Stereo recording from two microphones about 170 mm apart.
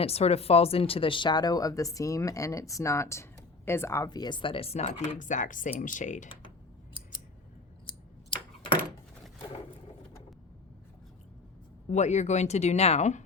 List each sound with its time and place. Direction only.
0.0 s speech: 35° left (ahead or behind)
11.9 s speech: 45° left (ahead or behind)